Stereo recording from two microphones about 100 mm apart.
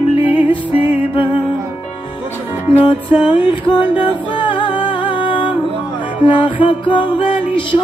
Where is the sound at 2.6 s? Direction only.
60° left (ahead or behind).